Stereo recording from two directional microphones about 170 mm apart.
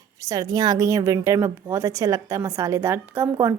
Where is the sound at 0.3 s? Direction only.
20° right (ahead or behind).